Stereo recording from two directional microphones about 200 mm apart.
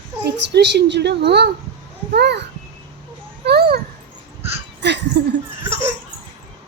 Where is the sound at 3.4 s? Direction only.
50° right (ahead or behind).